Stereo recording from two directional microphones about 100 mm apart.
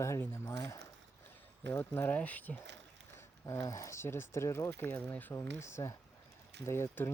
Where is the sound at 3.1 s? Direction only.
30° left (ahead or behind).